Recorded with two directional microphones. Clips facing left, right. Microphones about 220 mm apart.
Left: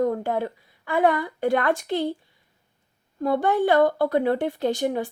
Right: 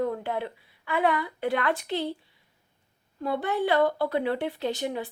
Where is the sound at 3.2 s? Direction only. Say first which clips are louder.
Left 5 dB; 45° left (ahead or behind).